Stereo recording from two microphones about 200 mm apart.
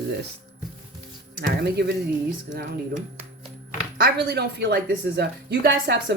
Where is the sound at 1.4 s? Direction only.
55° right (ahead or behind).